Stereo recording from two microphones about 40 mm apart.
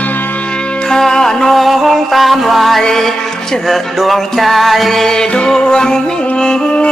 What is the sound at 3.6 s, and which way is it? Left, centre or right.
Music, centre.